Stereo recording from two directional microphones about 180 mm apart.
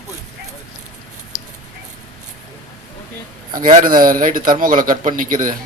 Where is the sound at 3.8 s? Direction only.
50° right (ahead or behind).